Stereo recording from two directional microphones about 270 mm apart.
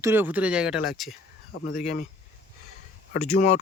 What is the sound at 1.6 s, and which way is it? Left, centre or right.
Speech, left.